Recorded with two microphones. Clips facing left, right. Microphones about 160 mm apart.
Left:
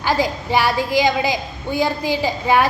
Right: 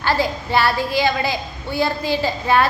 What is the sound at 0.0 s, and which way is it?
A woman's voice, 15° left (ahead or behind).